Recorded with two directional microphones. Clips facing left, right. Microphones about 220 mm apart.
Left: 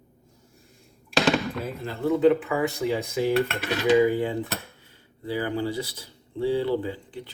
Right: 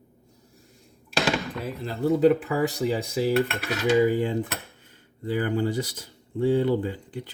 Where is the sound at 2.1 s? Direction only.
40° right (ahead or behind).